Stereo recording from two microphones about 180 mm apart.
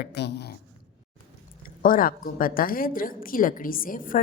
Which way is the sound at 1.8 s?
50° left (ahead or behind).